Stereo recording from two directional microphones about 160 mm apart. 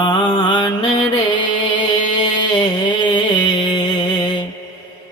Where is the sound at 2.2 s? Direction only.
30° left (ahead or behind).